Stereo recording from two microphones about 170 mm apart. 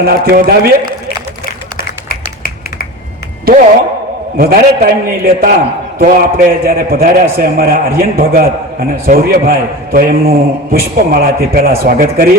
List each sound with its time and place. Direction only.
0.0 s a man's voice: 65° right (ahead or behind)
1.5 s a sound: 60° left (ahead or behind)
4.4 s a man's voice: 60° right (ahead or behind)